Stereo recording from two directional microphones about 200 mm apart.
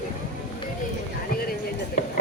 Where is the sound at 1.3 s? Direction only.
50° left (ahead or behind).